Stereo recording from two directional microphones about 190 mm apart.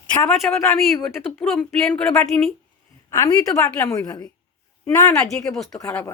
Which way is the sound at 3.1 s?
15° left (ahead or behind).